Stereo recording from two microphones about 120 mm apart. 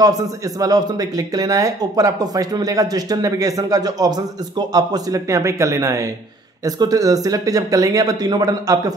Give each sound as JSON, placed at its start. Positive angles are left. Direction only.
{"t": 0.0, "sound": "a man's voice", "side_deg": -30}